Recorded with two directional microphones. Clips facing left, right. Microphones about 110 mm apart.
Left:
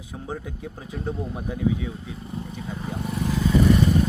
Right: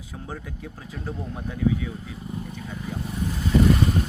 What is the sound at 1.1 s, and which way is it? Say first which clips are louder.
Speech: left 3 dB; 5° left (ahead or behind).